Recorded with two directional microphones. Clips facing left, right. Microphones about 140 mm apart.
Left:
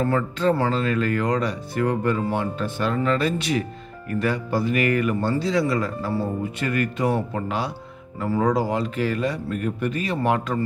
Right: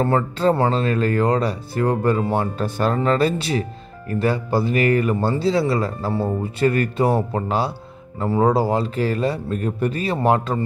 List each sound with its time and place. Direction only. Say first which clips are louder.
0.0 s speech: right 3 dB; 35° right (ahead or behind)